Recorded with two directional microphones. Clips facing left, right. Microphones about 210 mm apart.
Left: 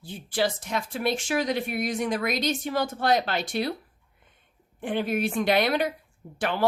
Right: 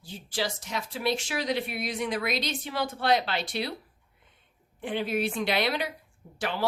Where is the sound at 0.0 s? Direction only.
55° left (ahead or behind).